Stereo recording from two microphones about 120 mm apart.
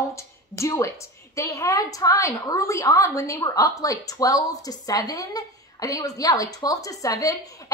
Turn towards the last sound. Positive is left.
turn(degrees=30)  # may be behind; listen again after turning